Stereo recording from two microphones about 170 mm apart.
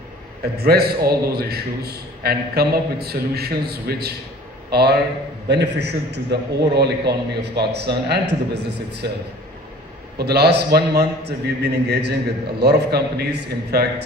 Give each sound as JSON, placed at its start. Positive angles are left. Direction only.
{"t": 0.5, "sound": "a man's voice", "side_deg": -70}
{"t": 10.2, "sound": "a man's voice", "side_deg": -75}